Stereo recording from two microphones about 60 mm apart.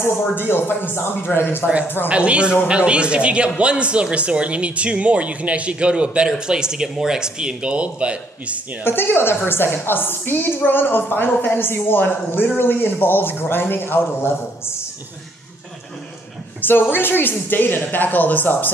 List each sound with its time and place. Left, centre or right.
0.0 s a woman's voice: left
2.0 s a man's voice: centre
8.8 s a woman's voice: left
16.9 s a woman's voice: left